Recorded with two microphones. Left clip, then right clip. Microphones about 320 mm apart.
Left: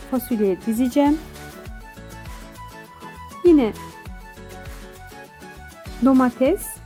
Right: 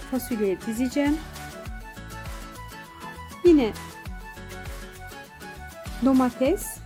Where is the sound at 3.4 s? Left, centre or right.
Centre.